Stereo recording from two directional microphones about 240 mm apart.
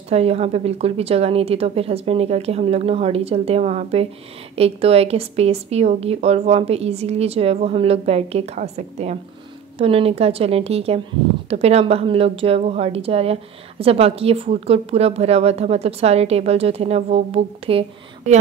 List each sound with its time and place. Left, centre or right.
0.1 s a woman's voice: right